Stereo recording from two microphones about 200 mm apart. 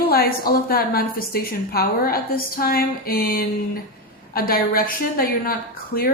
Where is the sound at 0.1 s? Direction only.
50° left (ahead or behind).